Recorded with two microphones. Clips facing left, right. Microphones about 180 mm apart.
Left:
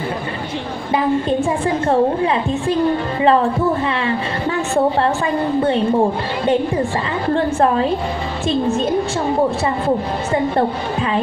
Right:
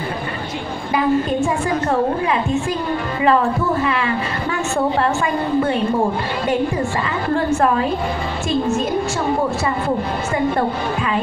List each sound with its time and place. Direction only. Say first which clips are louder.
0.9 s a woman's voice: even; 30° left (ahead or behind)